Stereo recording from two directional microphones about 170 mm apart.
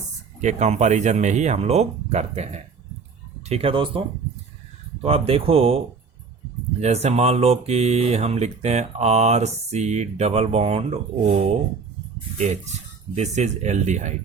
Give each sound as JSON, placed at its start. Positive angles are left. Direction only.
{"t": 0.4, "sound": "speech", "side_deg": -45}
{"t": 5.0, "sound": "speech", "side_deg": -35}
{"t": 13.1, "sound": "speech", "side_deg": -40}